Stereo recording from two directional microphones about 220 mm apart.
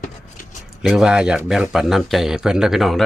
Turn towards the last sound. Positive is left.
turn(degrees=0)  # may be behind; listen again after turning